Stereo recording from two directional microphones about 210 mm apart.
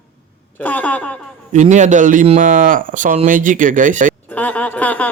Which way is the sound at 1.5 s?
35° right (ahead or behind).